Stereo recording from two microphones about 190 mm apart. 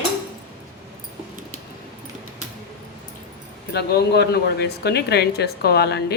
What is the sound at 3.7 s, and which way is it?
Speech, 60° left (ahead or behind).